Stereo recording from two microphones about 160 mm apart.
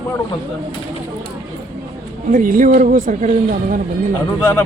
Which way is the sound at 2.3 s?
55° right (ahead or behind).